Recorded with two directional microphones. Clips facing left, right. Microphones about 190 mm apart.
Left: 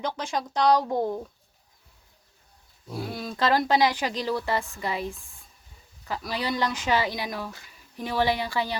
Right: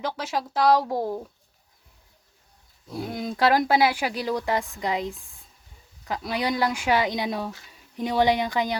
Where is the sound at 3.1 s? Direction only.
20° right (ahead or behind).